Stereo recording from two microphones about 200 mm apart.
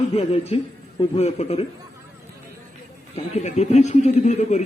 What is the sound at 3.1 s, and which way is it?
A man's voice, 35° left (ahead or behind).